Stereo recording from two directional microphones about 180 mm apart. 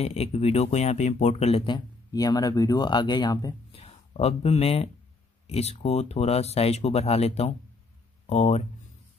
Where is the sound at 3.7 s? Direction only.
35° left (ahead or behind).